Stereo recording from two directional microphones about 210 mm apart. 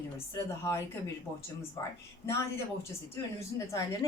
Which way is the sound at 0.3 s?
10° left (ahead or behind).